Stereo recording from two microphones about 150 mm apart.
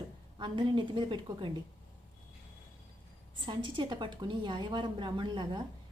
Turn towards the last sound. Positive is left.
turn(degrees=-30)  # may be behind; listen again after turning